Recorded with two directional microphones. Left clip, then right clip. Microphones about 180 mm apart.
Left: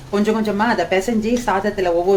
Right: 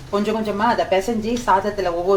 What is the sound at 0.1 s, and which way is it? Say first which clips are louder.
Speech: left 2 dB; 25° left (ahead or behind).